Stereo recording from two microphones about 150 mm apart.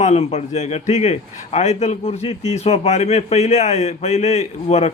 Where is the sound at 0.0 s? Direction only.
45° left (ahead or behind).